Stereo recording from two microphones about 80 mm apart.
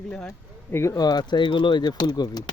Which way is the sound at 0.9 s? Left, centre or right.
Left.